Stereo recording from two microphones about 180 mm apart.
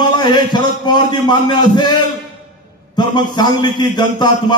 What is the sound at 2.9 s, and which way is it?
A man's voice, 25° left (ahead or behind).